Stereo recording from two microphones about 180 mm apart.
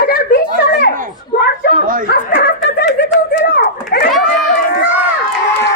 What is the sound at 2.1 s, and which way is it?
Snicker, 70° left (ahead or behind).